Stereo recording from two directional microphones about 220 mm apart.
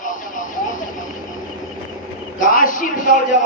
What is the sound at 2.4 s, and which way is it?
Speech, 40° left (ahead or behind).